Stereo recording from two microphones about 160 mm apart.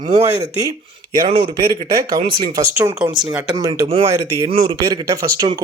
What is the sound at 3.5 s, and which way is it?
Speech, 25° right (ahead or behind).